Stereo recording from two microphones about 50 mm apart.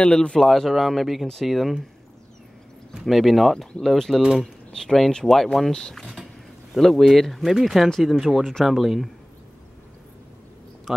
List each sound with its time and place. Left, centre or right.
0.0 s speech: centre
0.5 s speech: centre
3.1 s speech: centre
10.9 s speech: centre